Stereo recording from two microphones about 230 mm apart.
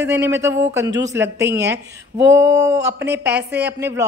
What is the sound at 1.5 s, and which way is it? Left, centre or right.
Speech, right.